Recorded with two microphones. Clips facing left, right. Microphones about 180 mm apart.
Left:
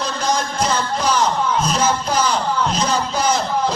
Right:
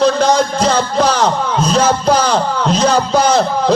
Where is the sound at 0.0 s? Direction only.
70° right (ahead or behind).